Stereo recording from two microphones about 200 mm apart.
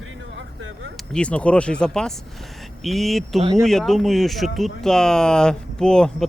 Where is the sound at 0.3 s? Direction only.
65° right (ahead or behind).